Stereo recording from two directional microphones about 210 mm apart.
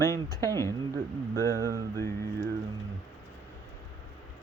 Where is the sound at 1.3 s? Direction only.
15° left (ahead or behind).